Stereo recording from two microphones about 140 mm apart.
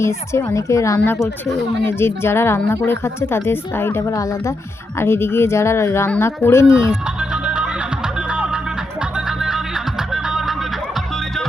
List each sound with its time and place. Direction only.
0.0 s a woman's voice: 20° left (ahead or behind)
6.7 s music: 5° right (ahead or behind)